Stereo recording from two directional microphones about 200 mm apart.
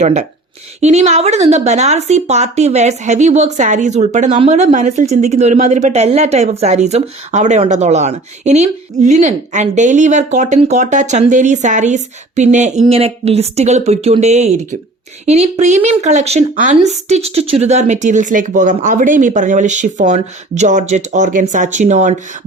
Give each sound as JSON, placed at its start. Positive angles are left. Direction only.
{"t": 0.0, "sound": "speech", "side_deg": -35}